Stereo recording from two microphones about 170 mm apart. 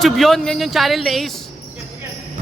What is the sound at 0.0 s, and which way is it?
Speech, centre (ahead or behind).